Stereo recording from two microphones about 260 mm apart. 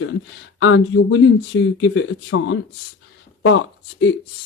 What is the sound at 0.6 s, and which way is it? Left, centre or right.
Speech, left.